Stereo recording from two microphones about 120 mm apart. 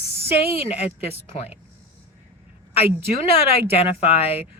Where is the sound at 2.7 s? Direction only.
55° left (ahead or behind).